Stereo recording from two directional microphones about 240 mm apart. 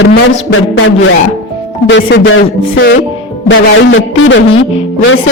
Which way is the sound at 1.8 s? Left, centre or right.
Left.